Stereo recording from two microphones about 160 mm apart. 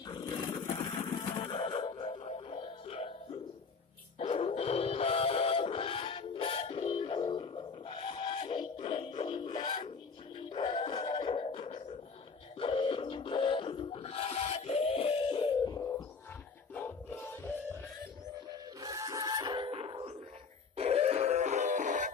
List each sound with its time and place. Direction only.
0.0 s wild animals: 25° left (ahead or behind)
1.0 s music: 25° left (ahead or behind)
4.2 s music: 40° left (ahead or behind)
15.6 s music: 25° left (ahead or behind)
18.5 s music: 20° right (ahead or behind); by 22.1 s 50° right (ahead or behind)